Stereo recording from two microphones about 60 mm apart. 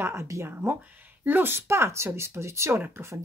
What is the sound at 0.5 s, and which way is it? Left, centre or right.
A woman's voice, right.